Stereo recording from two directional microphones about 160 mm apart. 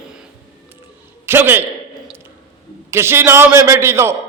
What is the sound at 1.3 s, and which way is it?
Speech, 15° right (ahead or behind).